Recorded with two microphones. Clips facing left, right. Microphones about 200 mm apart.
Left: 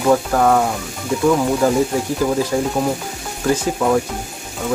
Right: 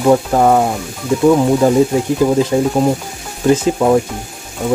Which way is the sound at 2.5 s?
20° right (ahead or behind).